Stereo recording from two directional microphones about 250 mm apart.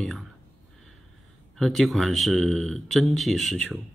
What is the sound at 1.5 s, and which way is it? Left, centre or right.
Speech, centre.